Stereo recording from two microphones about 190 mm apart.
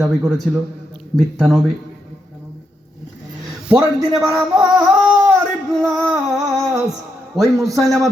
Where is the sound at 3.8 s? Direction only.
20° right (ahead or behind).